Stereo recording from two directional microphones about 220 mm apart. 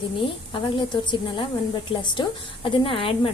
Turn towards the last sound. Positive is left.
turn(degrees=25)  # may be behind; listen again after turning